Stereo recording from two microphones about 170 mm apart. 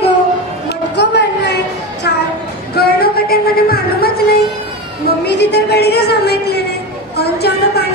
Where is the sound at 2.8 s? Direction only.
65° left (ahead or behind).